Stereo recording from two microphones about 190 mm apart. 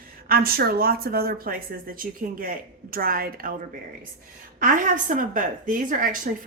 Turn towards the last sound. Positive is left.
turn(degrees=-45)  # may be behind; listen again after turning